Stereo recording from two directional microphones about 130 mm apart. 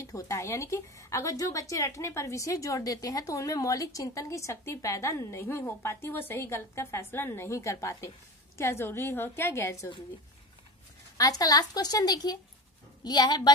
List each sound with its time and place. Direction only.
0.0 s a woman's voice: 25° left (ahead or behind)
11.1 s a woman's voice: 30° left (ahead or behind)